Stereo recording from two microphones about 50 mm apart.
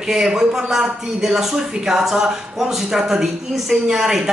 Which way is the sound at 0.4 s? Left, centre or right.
Centre.